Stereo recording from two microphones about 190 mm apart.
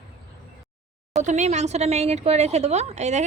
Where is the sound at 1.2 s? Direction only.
40° right (ahead or behind).